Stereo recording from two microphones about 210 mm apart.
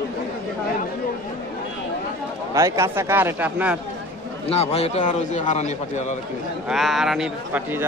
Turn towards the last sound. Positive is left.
turn(degrees=-5)  # may be behind; listen again after turning